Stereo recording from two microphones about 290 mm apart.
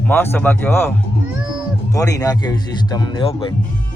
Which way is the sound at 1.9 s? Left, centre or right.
Centre.